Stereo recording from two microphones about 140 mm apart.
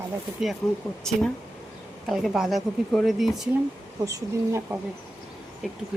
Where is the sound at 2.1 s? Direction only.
Centre (ahead or behind).